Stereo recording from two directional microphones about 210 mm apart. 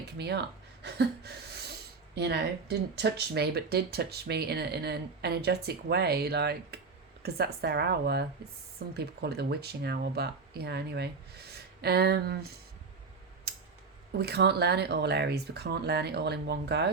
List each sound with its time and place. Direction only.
0.2 s speech: 50° right (ahead or behind)
13.5 s scissors: 50° right (ahead or behind)
14.2 s speech: 50° right (ahead or behind)